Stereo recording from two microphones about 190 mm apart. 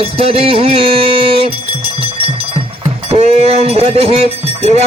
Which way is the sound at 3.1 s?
35° right (ahead or behind).